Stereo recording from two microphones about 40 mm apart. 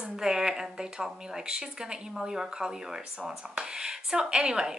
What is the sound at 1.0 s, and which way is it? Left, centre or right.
A woman's voice, centre.